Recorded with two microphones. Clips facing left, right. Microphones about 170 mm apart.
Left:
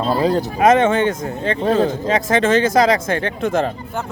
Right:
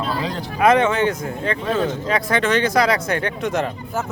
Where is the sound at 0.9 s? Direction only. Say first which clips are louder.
Left 3 dB; 25° left (ahead or behind).